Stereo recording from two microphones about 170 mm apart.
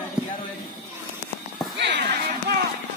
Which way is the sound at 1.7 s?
90° right.